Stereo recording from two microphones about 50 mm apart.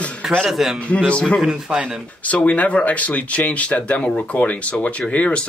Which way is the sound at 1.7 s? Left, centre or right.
Centre.